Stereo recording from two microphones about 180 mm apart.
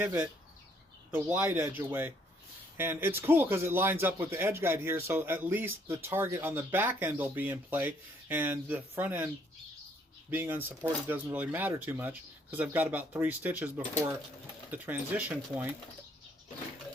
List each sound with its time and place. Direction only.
0.0 s speech: 10° right (ahead or behind)